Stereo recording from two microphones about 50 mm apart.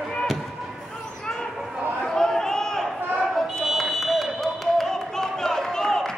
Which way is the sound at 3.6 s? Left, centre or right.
Centre.